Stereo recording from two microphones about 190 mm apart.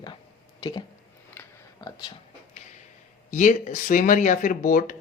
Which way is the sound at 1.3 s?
10° left (ahead or behind).